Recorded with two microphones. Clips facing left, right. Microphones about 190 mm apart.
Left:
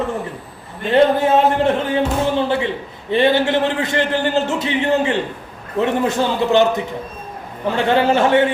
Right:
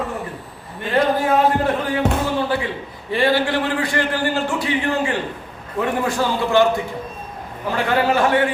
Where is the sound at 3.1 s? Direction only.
20° left (ahead or behind).